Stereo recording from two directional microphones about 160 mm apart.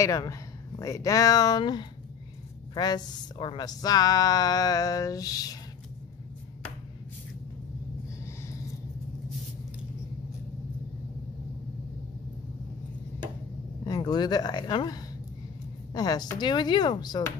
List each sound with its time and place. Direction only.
0.0 s a woman's voice: 20° left (ahead or behind)
13.8 s a woman's voice: 25° left (ahead or behind)